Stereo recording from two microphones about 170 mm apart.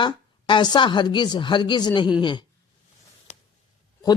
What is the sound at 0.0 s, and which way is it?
Speech, 30° left (ahead or behind).